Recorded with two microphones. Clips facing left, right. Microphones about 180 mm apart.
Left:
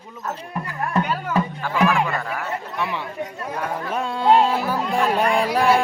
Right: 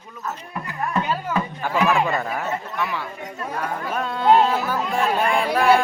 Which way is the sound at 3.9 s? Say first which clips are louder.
Left 1 dB; 25° left (ahead or behind).